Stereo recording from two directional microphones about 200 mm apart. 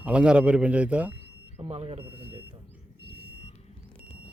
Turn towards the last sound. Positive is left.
turn(degrees=30)  # may be behind; listen again after turning